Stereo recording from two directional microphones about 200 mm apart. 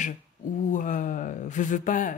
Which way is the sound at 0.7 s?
40° left (ahead or behind).